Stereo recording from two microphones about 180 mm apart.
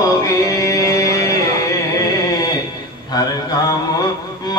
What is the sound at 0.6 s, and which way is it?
Music, 20° left (ahead or behind).